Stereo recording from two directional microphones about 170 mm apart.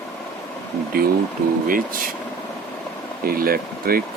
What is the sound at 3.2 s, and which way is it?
Speech, 60° right (ahead or behind).